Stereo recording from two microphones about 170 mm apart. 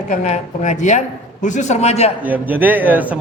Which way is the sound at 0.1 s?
45° left (ahead or behind).